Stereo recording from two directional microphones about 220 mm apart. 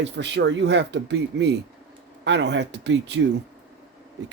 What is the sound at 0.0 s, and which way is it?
Speech, 50° right (ahead or behind).